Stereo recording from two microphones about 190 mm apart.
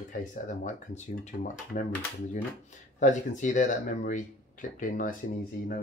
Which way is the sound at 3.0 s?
40° left (ahead or behind).